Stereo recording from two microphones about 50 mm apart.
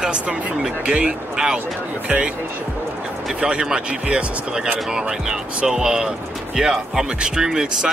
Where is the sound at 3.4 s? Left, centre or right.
Centre.